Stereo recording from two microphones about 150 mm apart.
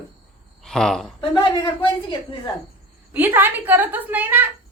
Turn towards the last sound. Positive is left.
turn(degrees=-10)  # may be behind; listen again after turning